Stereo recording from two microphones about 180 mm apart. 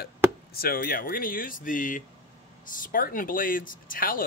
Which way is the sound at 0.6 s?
55° left (ahead or behind).